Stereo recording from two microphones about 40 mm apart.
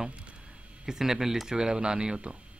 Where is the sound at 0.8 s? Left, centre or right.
Centre.